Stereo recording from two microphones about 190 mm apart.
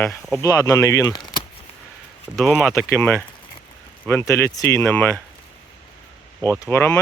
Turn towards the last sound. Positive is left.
turn(degrees=10)  # may be behind; listen again after turning